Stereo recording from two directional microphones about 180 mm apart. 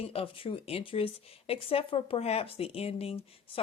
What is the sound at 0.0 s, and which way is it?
Speech, 30° left (ahead or behind).